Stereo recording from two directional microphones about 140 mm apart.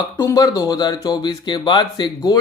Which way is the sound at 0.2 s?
25° left (ahead or behind).